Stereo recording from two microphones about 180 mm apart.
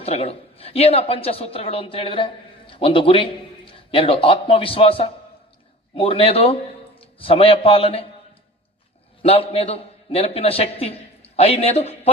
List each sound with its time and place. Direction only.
0.0 s a man's voice: 35° left (ahead or behind)
9.2 s a man's voice: 35° left (ahead or behind)